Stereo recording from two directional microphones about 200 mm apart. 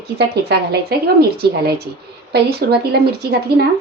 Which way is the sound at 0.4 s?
55° right (ahead or behind).